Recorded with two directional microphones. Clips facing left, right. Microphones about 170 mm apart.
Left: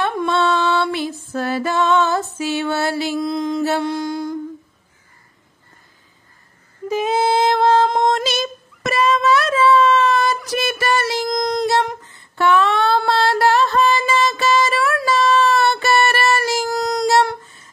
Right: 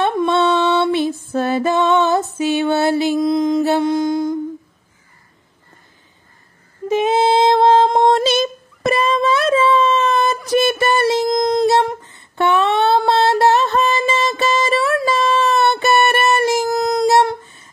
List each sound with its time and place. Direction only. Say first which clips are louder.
0.0 s female singing: right 3 dB; 20° right (ahead or behind)
6.9 s female singing: right 3 dB; 25° right (ahead or behind)